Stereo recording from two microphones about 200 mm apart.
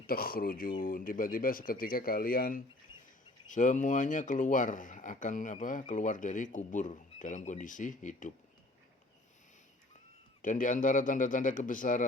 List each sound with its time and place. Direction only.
0.1 s speech: 50° left (ahead or behind)
10.4 s speech: 40° left (ahead or behind)